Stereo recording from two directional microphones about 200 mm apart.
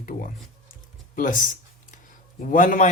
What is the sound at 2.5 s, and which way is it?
Speech, 40° left (ahead or behind).